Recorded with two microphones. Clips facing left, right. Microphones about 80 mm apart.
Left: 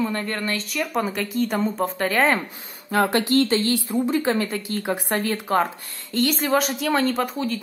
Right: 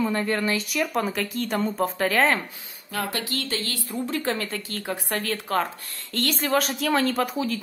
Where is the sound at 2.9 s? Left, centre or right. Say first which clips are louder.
Left 9 dB; left.